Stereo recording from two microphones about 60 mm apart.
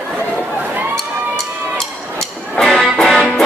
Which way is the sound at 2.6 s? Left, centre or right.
Centre.